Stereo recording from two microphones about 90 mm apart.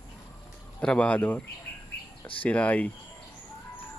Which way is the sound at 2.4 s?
15° left (ahead or behind).